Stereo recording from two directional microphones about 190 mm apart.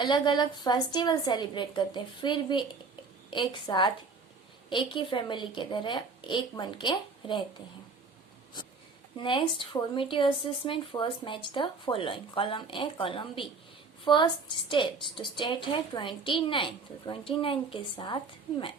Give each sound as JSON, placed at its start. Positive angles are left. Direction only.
{"t": 0.0, "sound": "speech", "side_deg": 25}
{"t": 9.1, "sound": "a woman's voice", "side_deg": 25}